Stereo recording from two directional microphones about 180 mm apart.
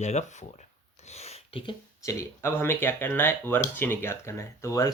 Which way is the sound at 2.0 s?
15° left (ahead or behind).